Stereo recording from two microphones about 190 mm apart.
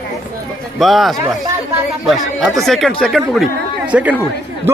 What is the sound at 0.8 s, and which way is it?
Speech, centre (ahead or behind).